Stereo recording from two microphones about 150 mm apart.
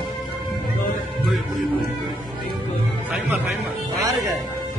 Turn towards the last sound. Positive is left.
turn(degrees=-20)  # may be behind; listen again after turning